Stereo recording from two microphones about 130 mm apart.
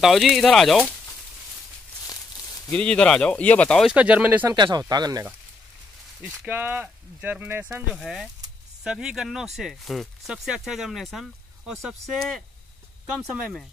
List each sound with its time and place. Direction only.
0.0 s speech: centre (ahead or behind)
2.0 s a sound: 30° left (ahead or behind)
2.7 s speech: 10° left (ahead or behind)
3.8 s speech: 10° right (ahead or behind)
4.5 s speech: 30° right (ahead or behind)
6.4 s speech: 15° right (ahead or behind)
7.9 s speech: centre (ahead or behind)